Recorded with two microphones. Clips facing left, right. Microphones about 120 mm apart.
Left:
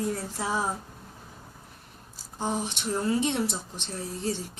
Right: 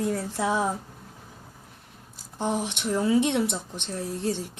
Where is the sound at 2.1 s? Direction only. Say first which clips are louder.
Right 3 dB; 60° right (ahead or behind).